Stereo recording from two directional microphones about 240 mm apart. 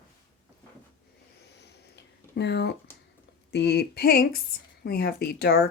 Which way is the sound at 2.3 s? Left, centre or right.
Left.